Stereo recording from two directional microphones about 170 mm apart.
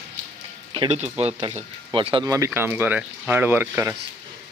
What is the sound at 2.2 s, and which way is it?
Speech, 20° right (ahead or behind).